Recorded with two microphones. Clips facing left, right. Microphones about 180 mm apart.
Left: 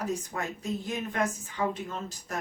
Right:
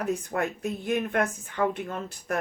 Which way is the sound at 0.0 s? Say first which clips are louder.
Right 5 dB; 60° right (ahead or behind).